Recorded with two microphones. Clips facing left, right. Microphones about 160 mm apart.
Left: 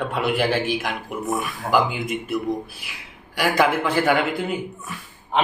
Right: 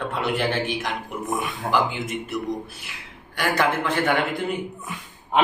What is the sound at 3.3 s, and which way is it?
Speech, 10° left (ahead or behind).